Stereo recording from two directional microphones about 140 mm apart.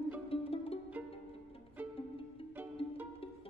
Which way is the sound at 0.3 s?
40° left (ahead or behind).